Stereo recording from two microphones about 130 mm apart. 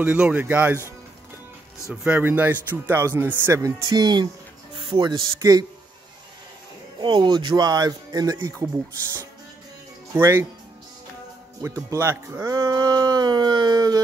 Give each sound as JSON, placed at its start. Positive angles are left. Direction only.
{"t": 0.0, "sound": "speech", "side_deg": -10}
{"t": 2.0, "sound": "speech", "side_deg": -10}
{"t": 4.7, "sound": "music", "side_deg": -40}
{"t": 5.4, "sound": "speech", "side_deg": -30}
{"t": 7.0, "sound": "speech", "side_deg": -35}
{"t": 10.1, "sound": "speech", "side_deg": -20}
{"t": 11.6, "sound": "speech", "side_deg": -20}